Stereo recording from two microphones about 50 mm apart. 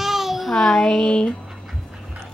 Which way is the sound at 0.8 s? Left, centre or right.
Centre.